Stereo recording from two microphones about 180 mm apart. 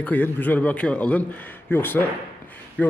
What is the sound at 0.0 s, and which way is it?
A man's voice, 10° left (ahead or behind).